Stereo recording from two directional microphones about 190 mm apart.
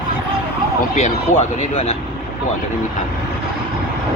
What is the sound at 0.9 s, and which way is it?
Speech, 35° left (ahead or behind).